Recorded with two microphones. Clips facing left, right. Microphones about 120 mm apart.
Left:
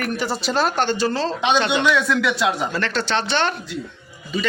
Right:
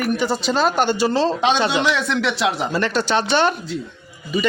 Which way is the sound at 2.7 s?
10° right (ahead or behind).